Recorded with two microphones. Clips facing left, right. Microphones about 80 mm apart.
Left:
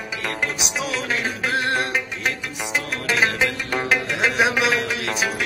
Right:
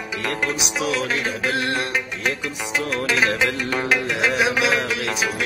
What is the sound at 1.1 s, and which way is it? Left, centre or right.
Music, left.